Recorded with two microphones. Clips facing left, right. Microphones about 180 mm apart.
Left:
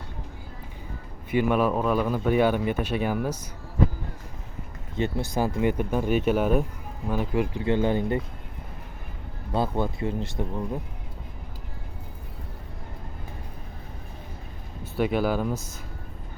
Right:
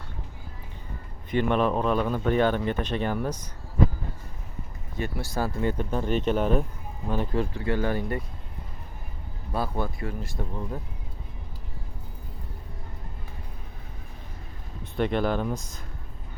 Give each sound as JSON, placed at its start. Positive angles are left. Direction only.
{"t": 1.3, "sound": "a man's voice", "side_deg": 5}
{"t": 4.9, "sound": "a man's voice", "side_deg": 20}
{"t": 9.5, "sound": "speech", "side_deg": 20}
{"t": 14.9, "sound": "speech", "side_deg": 5}